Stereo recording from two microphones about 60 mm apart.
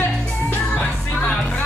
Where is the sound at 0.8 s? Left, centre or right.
Centre.